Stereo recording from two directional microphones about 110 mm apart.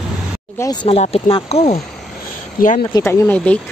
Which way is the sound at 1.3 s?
65° left (ahead or behind).